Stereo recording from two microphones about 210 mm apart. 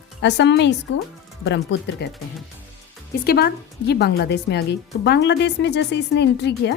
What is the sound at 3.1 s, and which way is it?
A woman's voice, 50° left (ahead or behind).